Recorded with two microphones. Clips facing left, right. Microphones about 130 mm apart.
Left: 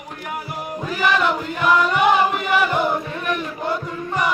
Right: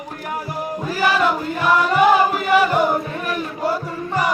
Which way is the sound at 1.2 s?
Centre (ahead or behind).